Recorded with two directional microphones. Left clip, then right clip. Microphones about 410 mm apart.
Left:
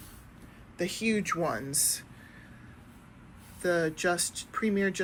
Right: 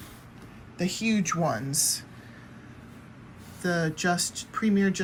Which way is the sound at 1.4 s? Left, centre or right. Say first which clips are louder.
Right 3 dB; right.